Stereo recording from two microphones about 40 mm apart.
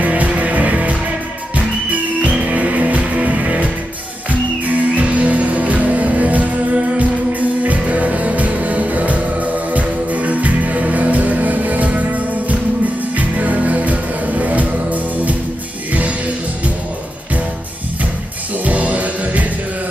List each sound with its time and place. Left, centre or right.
0.0 s music: right
18.6 s music: right